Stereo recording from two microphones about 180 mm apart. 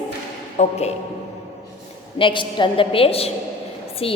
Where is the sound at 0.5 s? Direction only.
35° left (ahead or behind).